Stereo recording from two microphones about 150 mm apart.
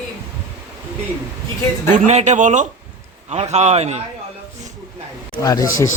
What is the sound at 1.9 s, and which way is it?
A man's voice, 50° right (ahead or behind).